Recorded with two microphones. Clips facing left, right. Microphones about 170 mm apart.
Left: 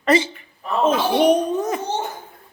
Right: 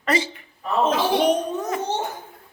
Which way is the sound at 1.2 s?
10° left (ahead or behind).